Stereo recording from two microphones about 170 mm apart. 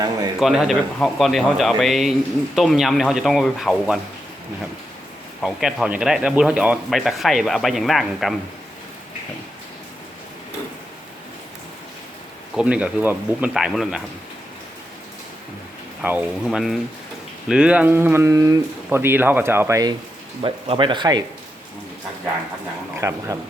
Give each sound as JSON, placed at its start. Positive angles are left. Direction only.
{"t": 0.3, "sound": "a man's voice", "side_deg": 0}
{"t": 5.4, "sound": "a man's voice", "side_deg": 0}
{"t": 12.5, "sound": "speech", "side_deg": -5}
{"t": 16.0, "sound": "a man's voice", "side_deg": -5}
{"t": 20.4, "sound": "speech", "side_deg": -30}
{"t": 23.0, "sound": "speech", "side_deg": -15}